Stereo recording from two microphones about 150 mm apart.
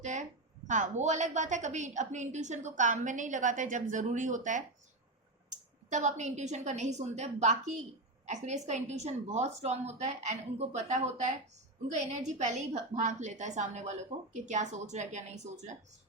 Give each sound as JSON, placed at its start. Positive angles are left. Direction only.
{"t": 0.0, "sound": "a woman's voice", "side_deg": -50}